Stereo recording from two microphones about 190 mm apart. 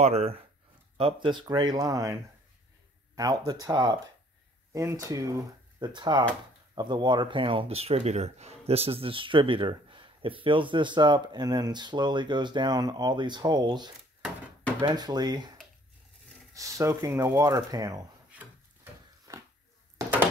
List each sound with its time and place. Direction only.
0.0 s speech: 35° right (ahead or behind); by 2.1 s 20° right (ahead or behind)
3.2 s speech: 20° right (ahead or behind)
16.5 s speech: 15° right (ahead or behind)
19.3 s a sound: 15° right (ahead or behind)